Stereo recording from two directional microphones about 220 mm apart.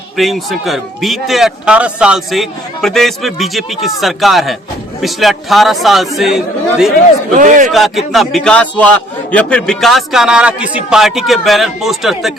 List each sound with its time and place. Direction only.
0.2 s speech: centre (ahead or behind)
7.3 s a man's voice: 35° right (ahead or behind)
7.7 s speech: centre (ahead or behind)